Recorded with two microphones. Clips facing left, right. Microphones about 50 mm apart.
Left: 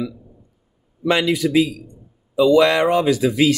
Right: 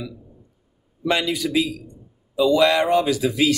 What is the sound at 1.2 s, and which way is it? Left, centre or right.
Speech, left.